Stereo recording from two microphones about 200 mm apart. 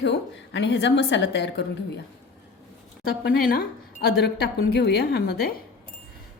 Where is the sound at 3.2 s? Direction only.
50° left (ahead or behind).